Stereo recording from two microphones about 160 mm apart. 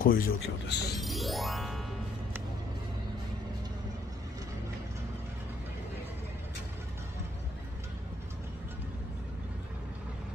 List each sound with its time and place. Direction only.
0.0 s speech: 65° left (ahead or behind); by 0.9 s 90° left
1.0 s music: centre (ahead or behind)